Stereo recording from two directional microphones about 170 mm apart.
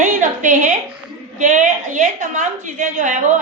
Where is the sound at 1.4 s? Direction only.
50° right (ahead or behind).